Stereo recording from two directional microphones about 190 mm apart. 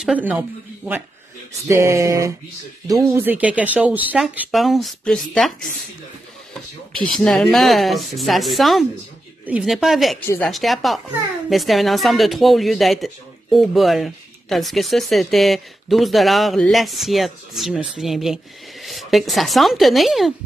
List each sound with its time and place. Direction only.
0.0 s speech: 5° right (ahead or behind)
6.9 s speech: 5° left (ahead or behind)